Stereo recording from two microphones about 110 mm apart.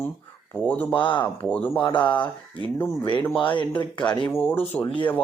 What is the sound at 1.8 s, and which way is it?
Speech, 45° left (ahead or behind).